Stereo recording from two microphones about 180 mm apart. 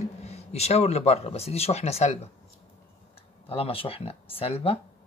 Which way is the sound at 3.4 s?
30° left (ahead or behind).